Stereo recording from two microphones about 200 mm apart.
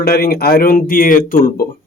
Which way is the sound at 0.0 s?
50° left (ahead or behind).